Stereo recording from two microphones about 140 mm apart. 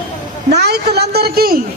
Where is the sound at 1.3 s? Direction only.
90° right.